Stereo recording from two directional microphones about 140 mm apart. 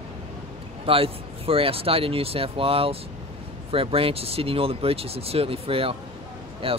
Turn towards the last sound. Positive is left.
turn(degrees=-40)  # may be behind; listen again after turning